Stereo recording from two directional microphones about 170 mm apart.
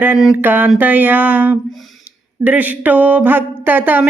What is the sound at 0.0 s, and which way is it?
Speech, 5° right (ahead or behind).